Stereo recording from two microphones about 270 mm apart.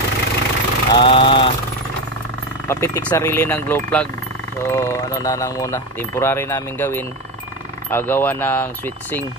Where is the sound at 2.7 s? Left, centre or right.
Centre.